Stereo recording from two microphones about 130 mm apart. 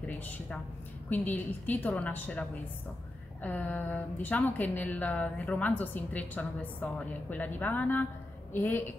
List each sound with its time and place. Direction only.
0.0 s a woman's voice: 10° left (ahead or behind)
3.4 s a woman's voice: 15° left (ahead or behind)